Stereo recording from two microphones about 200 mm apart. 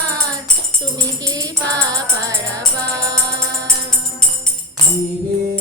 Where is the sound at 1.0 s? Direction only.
15° right (ahead or behind).